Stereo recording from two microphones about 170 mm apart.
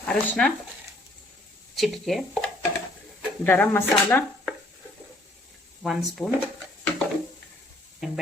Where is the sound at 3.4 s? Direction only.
10° left (ahead or behind).